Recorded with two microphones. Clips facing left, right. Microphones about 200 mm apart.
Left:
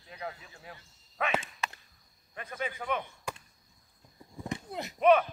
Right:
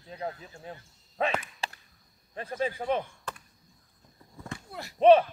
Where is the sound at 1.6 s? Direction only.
30° right (ahead or behind).